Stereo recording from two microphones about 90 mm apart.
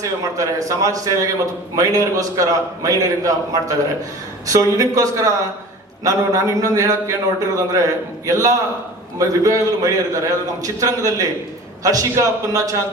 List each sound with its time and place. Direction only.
0.3 s a man's voice: 40° right (ahead or behind)